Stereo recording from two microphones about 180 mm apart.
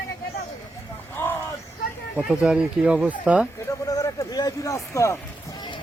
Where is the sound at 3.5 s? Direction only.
20° left (ahead or behind).